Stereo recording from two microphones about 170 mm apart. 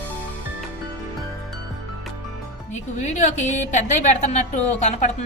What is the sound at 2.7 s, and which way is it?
A woman's voice, 40° left (ahead or behind).